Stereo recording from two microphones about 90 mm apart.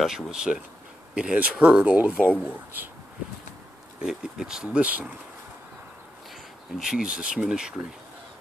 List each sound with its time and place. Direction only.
0.0 s speech: 5° right (ahead or behind)
4.0 s speech: 5° right (ahead or behind)
6.8 s speech: 10° right (ahead or behind)